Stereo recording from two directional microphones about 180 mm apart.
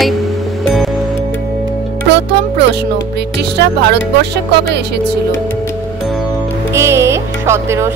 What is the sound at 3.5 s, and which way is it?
Speech, 70° right (ahead or behind).